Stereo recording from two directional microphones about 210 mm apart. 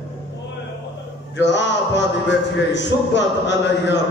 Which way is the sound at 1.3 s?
55° left (ahead or behind).